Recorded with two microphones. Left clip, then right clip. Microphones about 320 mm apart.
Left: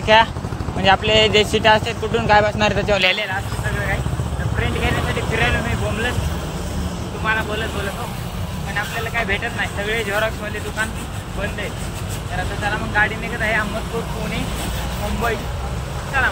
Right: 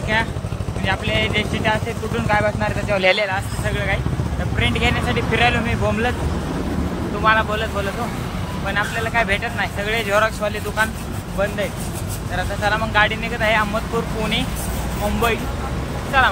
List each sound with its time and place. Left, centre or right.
0.1 s speech: centre
4.6 s speech: centre
7.2 s speech: centre
8.7 s speech: centre
12.6 s speech: centre
16.1 s speech: centre